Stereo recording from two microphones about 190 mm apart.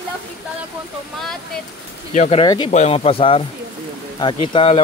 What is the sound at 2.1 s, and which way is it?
Speech, 40° left (ahead or behind).